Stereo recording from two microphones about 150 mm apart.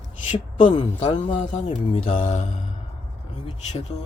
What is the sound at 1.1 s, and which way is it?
Speech, 30° left (ahead or behind).